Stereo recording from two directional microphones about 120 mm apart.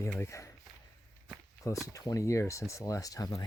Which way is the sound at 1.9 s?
25° left (ahead or behind).